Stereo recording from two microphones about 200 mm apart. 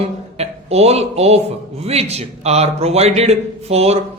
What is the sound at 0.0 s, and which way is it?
A man's voice, 30° right (ahead or behind).